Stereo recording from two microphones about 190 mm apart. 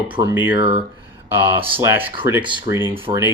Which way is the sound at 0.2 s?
25° right (ahead or behind).